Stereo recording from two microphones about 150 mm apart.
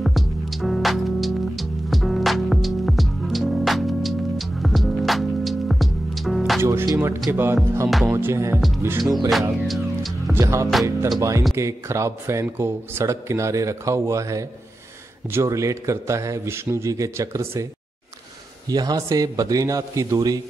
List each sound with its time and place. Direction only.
0.0 s music: centre (ahead or behind)
6.6 s music: 15° right (ahead or behind)
8.5 s speech: centre (ahead or behind)
8.8 s music: 15° right (ahead or behind)
9.3 s music: centre (ahead or behind)
10.3 s speech: 20° right (ahead or behind)
18.7 s speech: 25° right (ahead or behind)